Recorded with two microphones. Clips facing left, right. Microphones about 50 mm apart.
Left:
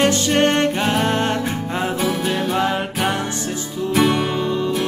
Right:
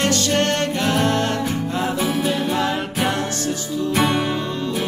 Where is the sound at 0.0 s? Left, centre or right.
Centre.